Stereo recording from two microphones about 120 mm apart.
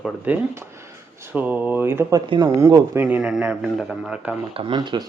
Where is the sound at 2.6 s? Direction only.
25° right (ahead or behind).